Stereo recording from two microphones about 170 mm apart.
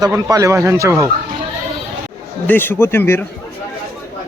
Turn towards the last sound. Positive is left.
turn(degrees=15)  # may be behind; listen again after turning